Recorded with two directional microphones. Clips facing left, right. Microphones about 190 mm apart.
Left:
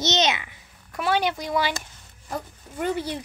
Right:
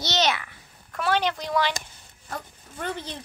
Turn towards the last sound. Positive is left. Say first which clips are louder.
# left 6 dB
turn(degrees=10)  # may be behind; listen again after turning